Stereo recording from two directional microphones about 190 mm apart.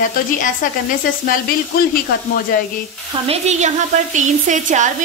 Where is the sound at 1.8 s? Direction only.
50° left (ahead or behind).